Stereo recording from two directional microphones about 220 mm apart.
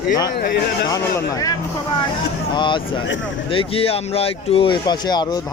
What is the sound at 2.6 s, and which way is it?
Speech, 20° left (ahead or behind).